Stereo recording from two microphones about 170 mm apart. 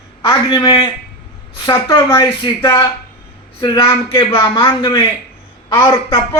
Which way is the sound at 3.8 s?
30° left (ahead or behind).